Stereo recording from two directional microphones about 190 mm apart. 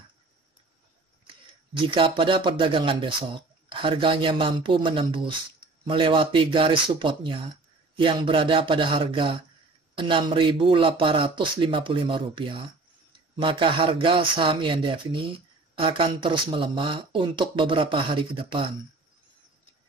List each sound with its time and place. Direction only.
1.2 s speech: 25° right (ahead or behind)